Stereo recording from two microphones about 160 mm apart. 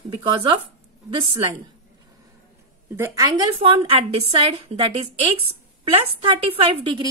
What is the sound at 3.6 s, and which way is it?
A woman's voice, 35° right (ahead or behind).